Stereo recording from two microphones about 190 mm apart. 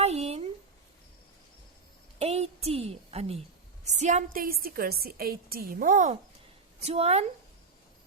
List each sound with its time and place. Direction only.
0.0 s a sound: 35° right (ahead or behind)
2.1 s a woman's voice: 35° right (ahead or behind)
6.8 s speech: 35° right (ahead or behind)